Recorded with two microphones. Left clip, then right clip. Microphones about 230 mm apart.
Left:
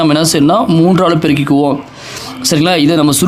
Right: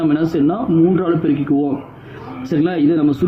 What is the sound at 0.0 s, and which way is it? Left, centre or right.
Speech, left.